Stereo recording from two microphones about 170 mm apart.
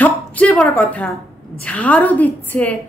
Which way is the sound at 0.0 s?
10° left (ahead or behind).